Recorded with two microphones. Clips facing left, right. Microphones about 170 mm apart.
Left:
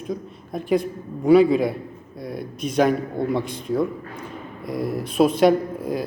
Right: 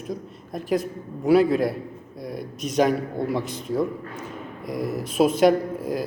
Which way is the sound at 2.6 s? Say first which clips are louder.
Left 1 dB; 55° left (ahead or behind).